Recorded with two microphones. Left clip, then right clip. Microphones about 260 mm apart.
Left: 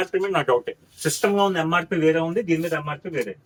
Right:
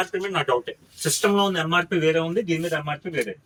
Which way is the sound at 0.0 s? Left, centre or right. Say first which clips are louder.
Left 2 dB; left.